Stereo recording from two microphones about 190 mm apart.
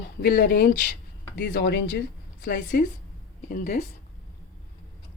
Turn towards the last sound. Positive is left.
turn(degrees=50)  # may be behind; listen again after turning